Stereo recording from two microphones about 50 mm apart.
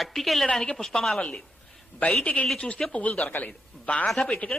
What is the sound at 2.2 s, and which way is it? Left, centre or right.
A woman's voice, left.